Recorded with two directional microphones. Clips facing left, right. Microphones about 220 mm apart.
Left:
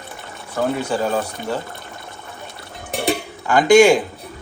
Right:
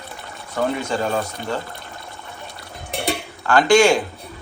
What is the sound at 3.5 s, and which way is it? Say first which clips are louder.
Speech: left 3 dB; 15° left (ahead or behind).